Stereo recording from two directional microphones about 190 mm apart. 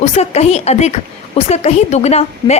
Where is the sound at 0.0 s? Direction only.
35° left (ahead or behind).